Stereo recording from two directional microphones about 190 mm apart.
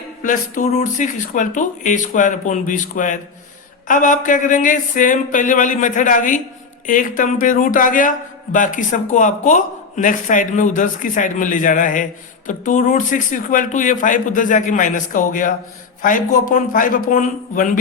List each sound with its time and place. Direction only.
0.2 s a man's voice: 45° left (ahead or behind)